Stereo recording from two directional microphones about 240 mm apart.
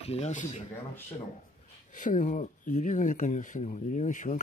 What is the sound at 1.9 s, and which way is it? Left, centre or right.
Speech, left.